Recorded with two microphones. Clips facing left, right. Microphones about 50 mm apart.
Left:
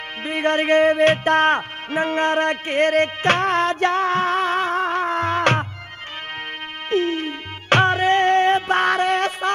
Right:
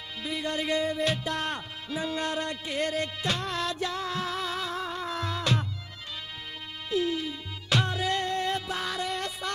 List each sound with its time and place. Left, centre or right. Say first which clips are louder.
0.2 s music: left 11 dB; left
6.9 s music: left 7 dB; left